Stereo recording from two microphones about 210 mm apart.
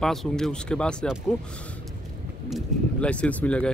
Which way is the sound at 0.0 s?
Centre (ahead or behind).